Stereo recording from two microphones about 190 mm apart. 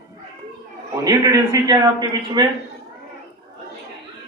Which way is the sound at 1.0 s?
20° right (ahead or behind).